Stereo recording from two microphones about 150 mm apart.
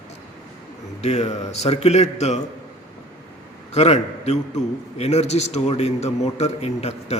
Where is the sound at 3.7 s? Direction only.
45° left (ahead or behind).